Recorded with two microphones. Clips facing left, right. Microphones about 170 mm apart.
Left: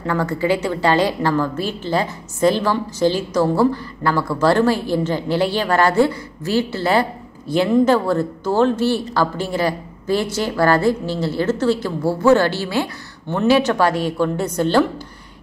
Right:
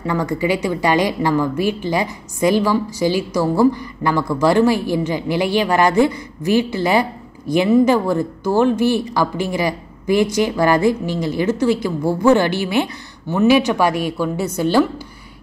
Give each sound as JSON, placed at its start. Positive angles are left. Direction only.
{"t": 0.0, "sound": "a woman's voice", "side_deg": -15}